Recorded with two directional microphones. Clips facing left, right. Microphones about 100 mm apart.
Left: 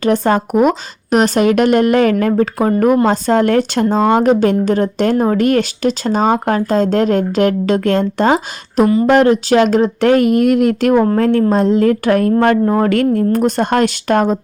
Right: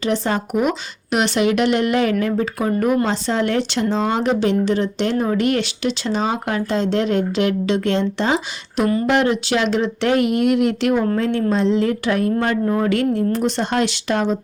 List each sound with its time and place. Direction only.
0.0 s speech: 50° left (ahead or behind)
12.6 s speech: 50° left (ahead or behind)